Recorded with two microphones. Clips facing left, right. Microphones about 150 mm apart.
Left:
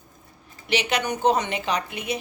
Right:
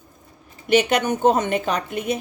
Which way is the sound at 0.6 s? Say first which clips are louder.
Right 7 dB; 50° right (ahead or behind).